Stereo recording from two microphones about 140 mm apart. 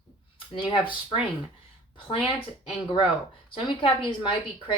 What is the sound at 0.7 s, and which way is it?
Speech, 35° left (ahead or behind).